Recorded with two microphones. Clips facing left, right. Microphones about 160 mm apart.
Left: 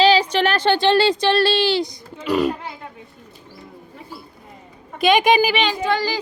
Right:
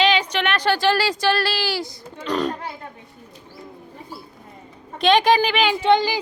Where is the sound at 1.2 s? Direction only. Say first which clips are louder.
Left 4 dB; 25° left (ahead or behind).